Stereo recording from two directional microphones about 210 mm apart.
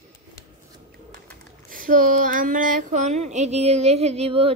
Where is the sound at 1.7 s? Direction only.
40° right (ahead or behind).